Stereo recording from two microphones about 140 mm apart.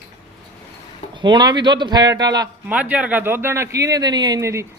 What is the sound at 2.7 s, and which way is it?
Speech, 10° right (ahead or behind).